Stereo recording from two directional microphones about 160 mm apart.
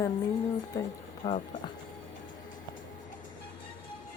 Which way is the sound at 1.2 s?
40° left (ahead or behind).